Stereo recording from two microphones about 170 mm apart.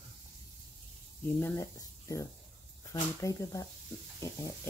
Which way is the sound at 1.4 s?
15° left (ahead or behind).